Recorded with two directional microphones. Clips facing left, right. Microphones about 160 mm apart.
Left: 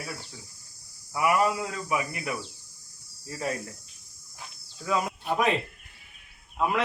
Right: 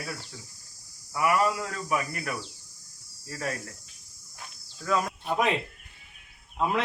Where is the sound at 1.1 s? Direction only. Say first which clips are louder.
Left 1 dB; 15° left (ahead or behind).